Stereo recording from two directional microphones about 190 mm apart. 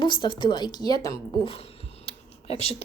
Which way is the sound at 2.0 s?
30° left (ahead or behind).